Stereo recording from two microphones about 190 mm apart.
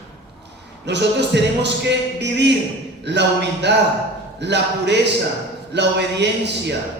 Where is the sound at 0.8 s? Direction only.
65° right (ahead or behind).